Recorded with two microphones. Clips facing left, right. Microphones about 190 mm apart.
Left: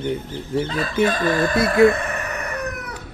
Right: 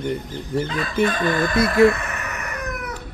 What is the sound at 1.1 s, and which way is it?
Speech, 35° left (ahead or behind).